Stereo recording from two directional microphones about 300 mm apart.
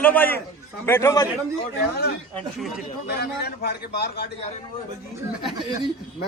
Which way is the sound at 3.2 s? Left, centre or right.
Left.